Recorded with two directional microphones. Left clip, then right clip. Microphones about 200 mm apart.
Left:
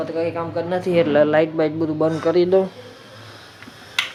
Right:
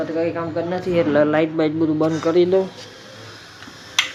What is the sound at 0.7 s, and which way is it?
Speech, 30° left (ahead or behind).